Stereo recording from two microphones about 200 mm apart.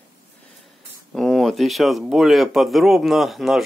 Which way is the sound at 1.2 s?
Centre (ahead or behind).